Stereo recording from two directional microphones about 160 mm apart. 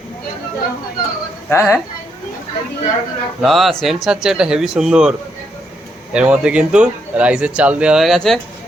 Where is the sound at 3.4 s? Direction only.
Centre (ahead or behind).